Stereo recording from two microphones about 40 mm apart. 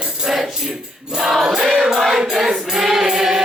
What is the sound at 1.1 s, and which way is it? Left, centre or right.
Music, centre.